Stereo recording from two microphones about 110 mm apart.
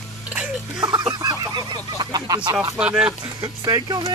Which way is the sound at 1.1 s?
35° right (ahead or behind).